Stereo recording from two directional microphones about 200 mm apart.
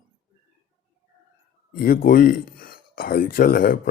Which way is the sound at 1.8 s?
45° left (ahead or behind).